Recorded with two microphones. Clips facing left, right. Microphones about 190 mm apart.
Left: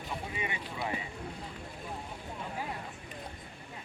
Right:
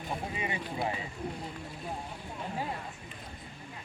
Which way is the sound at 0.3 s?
35° right (ahead or behind).